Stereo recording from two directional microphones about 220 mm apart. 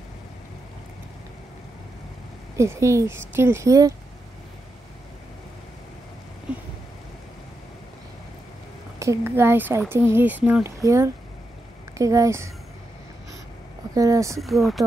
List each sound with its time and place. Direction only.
2.5 s speech: 15° right (ahead or behind)
6.5 s a sound: 5° right (ahead or behind)
9.0 s speech: 10° right (ahead or behind)
13.9 s speech: 15° right (ahead or behind)
14.4 s speech: centre (ahead or behind)